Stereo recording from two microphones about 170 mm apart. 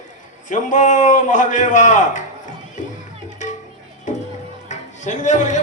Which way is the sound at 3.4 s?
45° left (ahead or behind).